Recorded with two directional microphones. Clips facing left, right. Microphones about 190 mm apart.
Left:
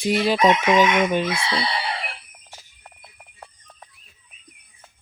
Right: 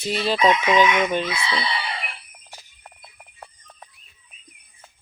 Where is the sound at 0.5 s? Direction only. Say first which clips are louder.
Left 1 dB; 50° left (ahead or behind).